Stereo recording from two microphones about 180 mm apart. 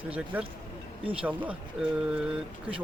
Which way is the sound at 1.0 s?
30° right (ahead or behind).